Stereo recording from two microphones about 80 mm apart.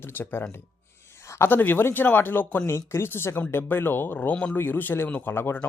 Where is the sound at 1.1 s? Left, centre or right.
Left.